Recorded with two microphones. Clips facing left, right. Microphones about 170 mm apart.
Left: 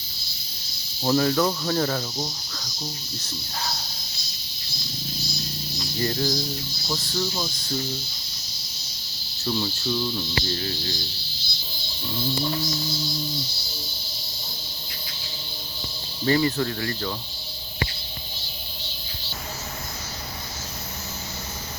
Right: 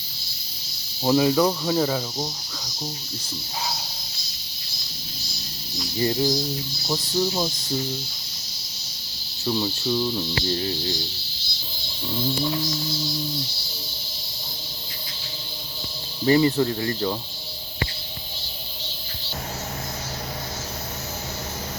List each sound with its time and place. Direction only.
1.0 s snake: 15° right (ahead or behind)
6.0 s snake: 15° right (ahead or behind)
6.8 s cricket: 20° right (ahead or behind)
9.4 s cricket: 15° right (ahead or behind)
16.2 s cricket: 20° right (ahead or behind)